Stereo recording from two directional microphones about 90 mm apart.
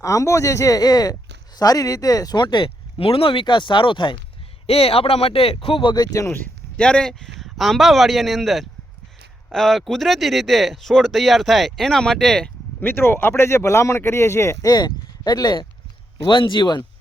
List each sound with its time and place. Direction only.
0.0 s speech: 35° left (ahead or behind); by 4.2 s 65° left (ahead or behind)
4.6 s speech: 90° left; by 6.1 s 55° left (ahead or behind)
6.1 s speech: 30° left (ahead or behind)
6.7 s speech: 10° left (ahead or behind)
12.8 s speech: 25° left (ahead or behind)
14.7 s speech: 45° left (ahead or behind)
16.1 s speech: 65° left (ahead or behind)